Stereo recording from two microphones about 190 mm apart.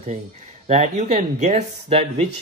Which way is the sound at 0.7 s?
35° right (ahead or behind).